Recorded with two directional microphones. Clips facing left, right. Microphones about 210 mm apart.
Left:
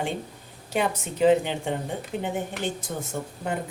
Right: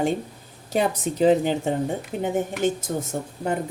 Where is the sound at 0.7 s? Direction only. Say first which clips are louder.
Right 4 dB; 35° right (ahead or behind).